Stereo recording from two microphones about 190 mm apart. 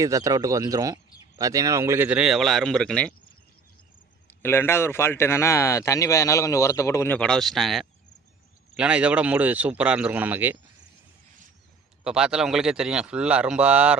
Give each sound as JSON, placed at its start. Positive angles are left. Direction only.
{"t": 0.0, "sound": "a man's voice", "side_deg": -15}
{"t": 4.4, "sound": "a man's voice", "side_deg": 10}
{"t": 12.0, "sound": "speech", "side_deg": -5}